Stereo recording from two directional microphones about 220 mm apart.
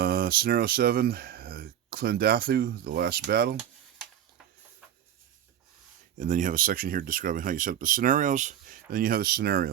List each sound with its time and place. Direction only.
0.0 s speech: 45° right (ahead or behind)
6.1 s speech: 35° right (ahead or behind)